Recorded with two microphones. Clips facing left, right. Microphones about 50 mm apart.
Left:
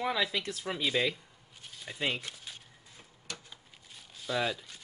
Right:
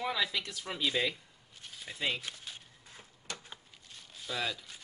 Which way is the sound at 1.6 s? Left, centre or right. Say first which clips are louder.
Left 1 dB; centre.